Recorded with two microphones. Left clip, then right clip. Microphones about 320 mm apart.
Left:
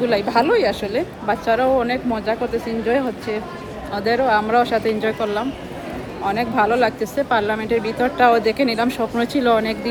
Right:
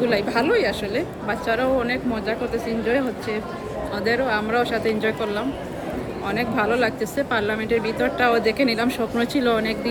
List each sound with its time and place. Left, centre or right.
0.0 s speech: centre